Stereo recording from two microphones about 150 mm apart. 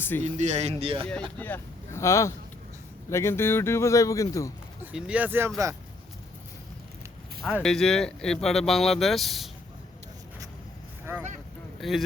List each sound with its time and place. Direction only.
0.2 s speech: 50° right (ahead or behind)
1.4 s speech: 15° left (ahead or behind)
4.8 s speech: 10° right (ahead or behind)
7.4 s speech: centre (ahead or behind)
11.0 s vehicle: 15° right (ahead or behind)
11.8 s speech: centre (ahead or behind)